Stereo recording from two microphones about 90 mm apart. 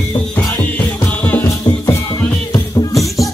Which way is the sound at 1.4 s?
30° left (ahead or behind).